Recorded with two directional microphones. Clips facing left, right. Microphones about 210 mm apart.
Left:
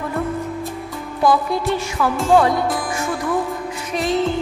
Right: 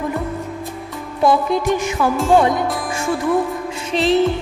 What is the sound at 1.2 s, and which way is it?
Music, 20° right (ahead or behind).